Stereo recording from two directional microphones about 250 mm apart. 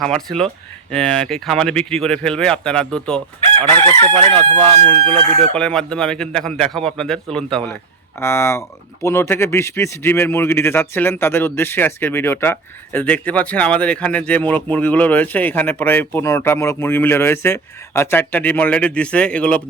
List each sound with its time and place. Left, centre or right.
0.0 s speech: centre
4.6 s speech: centre
5.1 s speech: right
5.5 s speech: centre